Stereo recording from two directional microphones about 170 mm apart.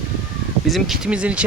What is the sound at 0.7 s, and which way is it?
Speech, centre (ahead or behind).